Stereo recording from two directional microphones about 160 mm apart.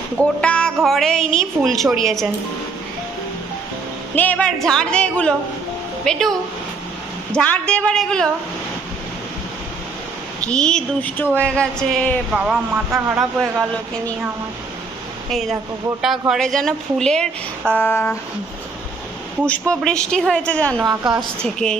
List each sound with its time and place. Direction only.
0.4 s speech: 5° left (ahead or behind)
4.1 s a woman's voice: 10° left (ahead or behind)
7.3 s speech: 5° left (ahead or behind)
10.4 s a woman's voice: 5° left (ahead or behind)
12.3 s speech: 5° right (ahead or behind)
16.0 s speech: centre (ahead or behind)
19.4 s speech: 5° left (ahead or behind)
20.8 s a woman's voice: 25° right (ahead or behind)
21.4 s speech: 5° left (ahead or behind)